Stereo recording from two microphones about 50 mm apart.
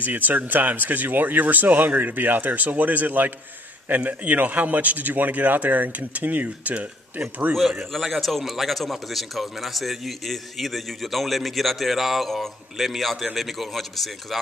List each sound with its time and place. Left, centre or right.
0.0 s speech: right
7.9 s a man's voice: centre